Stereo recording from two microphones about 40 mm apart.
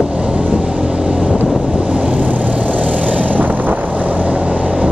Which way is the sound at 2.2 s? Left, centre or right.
Right.